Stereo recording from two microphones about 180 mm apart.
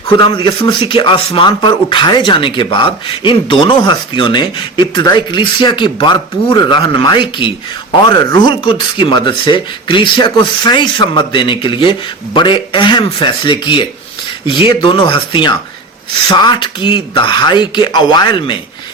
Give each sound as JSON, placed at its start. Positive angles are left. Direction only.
{"t": 0.2, "sound": "speech", "side_deg": 30}